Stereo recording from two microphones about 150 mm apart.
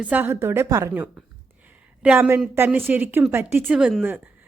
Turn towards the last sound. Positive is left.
turn(degrees=-10)  # may be behind; listen again after turning